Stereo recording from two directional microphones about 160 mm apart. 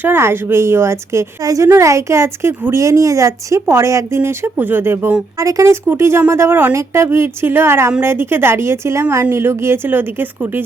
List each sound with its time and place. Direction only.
0.0 s speech: 15° right (ahead or behind)